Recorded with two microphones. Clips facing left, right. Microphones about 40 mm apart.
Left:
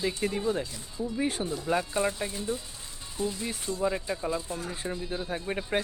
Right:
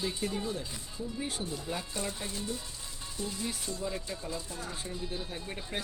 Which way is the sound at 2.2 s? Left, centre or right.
Left.